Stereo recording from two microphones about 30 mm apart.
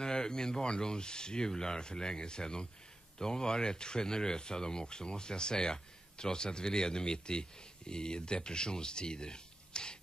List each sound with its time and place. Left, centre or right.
0.0 s speech: left